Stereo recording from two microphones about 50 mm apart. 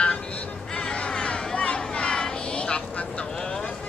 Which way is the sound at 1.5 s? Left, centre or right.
Left.